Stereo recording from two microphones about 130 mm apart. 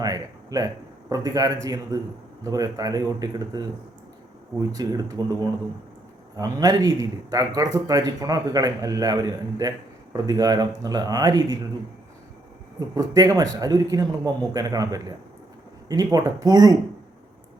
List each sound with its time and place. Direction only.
0.0 s a sound: 30° right (ahead or behind)
1.1 s a man's voice: 30° right (ahead or behind)
4.7 s speech: 30° right (ahead or behind)
12.9 s speech: 30° right (ahead or behind)